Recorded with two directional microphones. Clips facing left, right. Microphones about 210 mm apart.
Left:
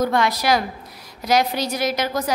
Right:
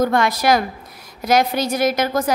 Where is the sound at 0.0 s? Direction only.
50° right (ahead or behind).